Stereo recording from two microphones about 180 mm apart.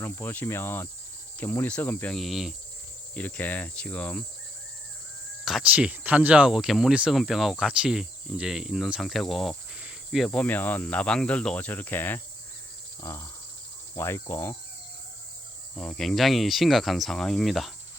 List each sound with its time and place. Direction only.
0.0 s cricket: 10° left (ahead or behind)
5.5 s speech: 5° right (ahead or behind)
13.0 s cricket: 15° left (ahead or behind)
15.7 s speech: 5° left (ahead or behind)